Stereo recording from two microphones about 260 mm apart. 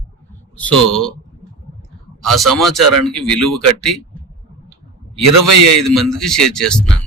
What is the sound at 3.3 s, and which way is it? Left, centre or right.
Speech, right.